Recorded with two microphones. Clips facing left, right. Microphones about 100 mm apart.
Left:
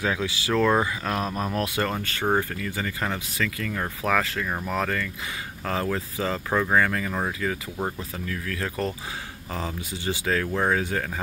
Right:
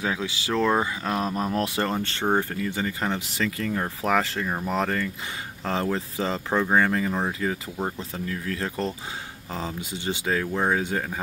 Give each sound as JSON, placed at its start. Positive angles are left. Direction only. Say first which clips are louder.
{"t": 0.0, "sound": "speech", "louder": "left 1 dB", "side_deg": -20}